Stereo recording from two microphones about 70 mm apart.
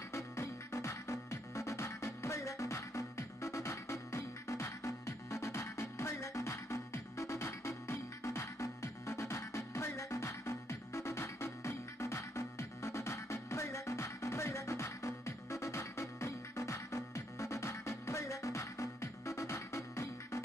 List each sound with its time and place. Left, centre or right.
0.1 s music: left